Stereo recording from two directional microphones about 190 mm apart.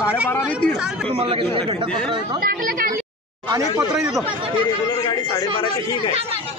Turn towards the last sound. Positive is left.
turn(degrees=20)  # may be behind; listen again after turning